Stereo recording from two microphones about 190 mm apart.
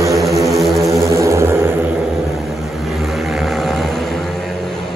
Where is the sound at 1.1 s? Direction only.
15° right (ahead or behind).